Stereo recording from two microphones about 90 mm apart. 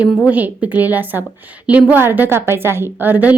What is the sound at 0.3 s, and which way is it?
A woman's voice, 15° right (ahead or behind).